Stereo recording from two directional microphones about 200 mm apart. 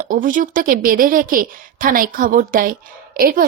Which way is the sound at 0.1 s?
40° right (ahead or behind).